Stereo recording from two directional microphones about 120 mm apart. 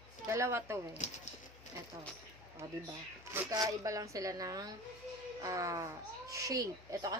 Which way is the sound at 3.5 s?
30° right (ahead or behind).